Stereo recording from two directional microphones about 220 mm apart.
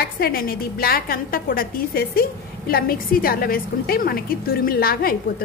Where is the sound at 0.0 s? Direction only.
45° left (ahead or behind).